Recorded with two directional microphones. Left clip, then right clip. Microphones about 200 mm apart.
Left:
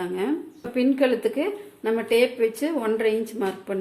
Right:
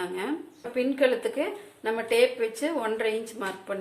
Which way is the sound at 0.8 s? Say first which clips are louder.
Left 3 dB; 20° left (ahead or behind).